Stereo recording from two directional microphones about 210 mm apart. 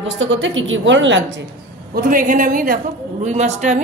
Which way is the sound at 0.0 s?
60° right (ahead or behind).